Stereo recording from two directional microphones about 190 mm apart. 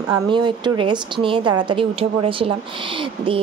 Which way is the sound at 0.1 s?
25° right (ahead or behind).